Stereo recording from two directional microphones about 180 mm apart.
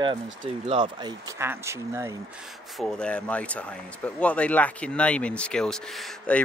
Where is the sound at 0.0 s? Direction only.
25° right (ahead or behind).